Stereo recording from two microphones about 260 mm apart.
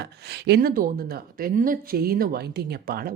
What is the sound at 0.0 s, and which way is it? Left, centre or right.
A woman's voice, right.